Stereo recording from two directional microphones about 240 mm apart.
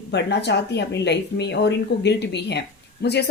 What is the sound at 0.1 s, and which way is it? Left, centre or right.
Speech, left.